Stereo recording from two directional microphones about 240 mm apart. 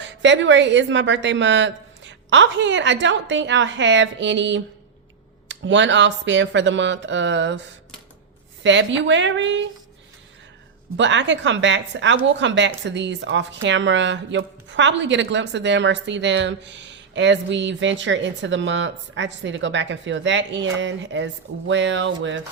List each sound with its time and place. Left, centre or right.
0.0 s a woman's voice: right
8.6 s a woman's voice: right
10.9 s a woman's voice: right